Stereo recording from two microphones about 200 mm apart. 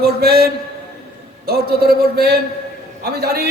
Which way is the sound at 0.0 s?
50° right (ahead or behind).